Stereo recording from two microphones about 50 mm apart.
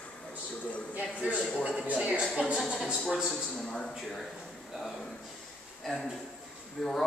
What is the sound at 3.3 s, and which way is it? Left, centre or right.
Speech, centre.